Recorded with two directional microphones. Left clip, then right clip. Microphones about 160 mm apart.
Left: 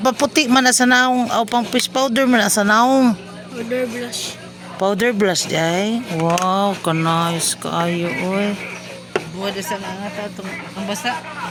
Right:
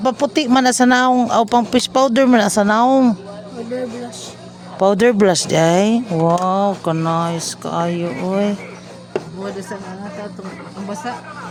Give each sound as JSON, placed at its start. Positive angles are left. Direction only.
{"t": 0.0, "sound": "speech", "side_deg": -5}
{"t": 4.8, "sound": "speech", "side_deg": -25}
{"t": 6.2, "sound": "speech", "side_deg": -10}
{"t": 8.3, "sound": "speech", "side_deg": -20}